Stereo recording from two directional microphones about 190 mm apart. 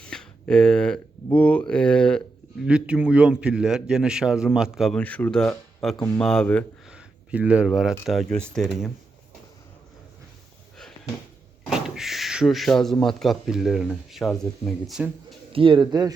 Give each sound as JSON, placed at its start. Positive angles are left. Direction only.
{"t": 0.0, "sound": "speech", "side_deg": 5}
{"t": 6.9, "sound": "speech", "side_deg": -5}
{"t": 11.7, "sound": "speech", "side_deg": 0}
{"t": 15.5, "sound": "a man's voice", "side_deg": -25}